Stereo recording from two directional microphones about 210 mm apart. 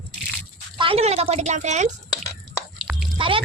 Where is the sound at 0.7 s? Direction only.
25° right (ahead or behind).